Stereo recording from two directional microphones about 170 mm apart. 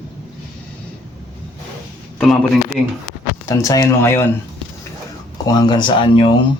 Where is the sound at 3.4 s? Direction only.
20° left (ahead or behind).